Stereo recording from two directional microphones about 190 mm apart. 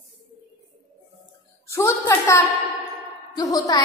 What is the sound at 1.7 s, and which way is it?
A woman's voice, 15° left (ahead or behind).